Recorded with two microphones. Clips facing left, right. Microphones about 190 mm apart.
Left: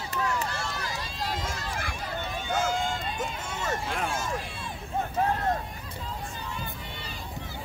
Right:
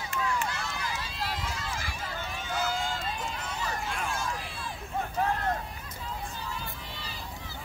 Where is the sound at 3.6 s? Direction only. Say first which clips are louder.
Left 5 dB; 50° left (ahead or behind).